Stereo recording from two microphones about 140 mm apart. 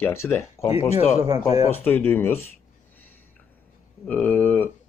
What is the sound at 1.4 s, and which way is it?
Speech, 50° left (ahead or behind).